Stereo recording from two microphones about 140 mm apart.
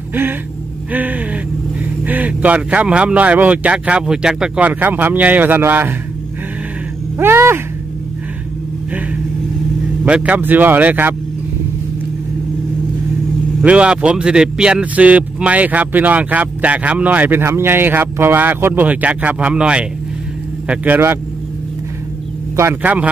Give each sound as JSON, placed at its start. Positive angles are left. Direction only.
{"t": 0.9, "sound": "speech", "side_deg": -10}
{"t": 7.2, "sound": "speech", "side_deg": -15}
{"t": 10.0, "sound": "speech", "side_deg": -10}
{"t": 13.6, "sound": "speech", "side_deg": -5}
{"t": 22.6, "sound": "speech", "side_deg": -15}